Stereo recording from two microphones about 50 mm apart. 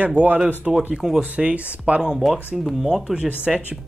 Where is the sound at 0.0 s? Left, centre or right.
Right.